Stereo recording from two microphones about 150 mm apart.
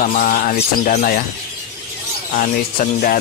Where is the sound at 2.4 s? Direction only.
65° left (ahead or behind).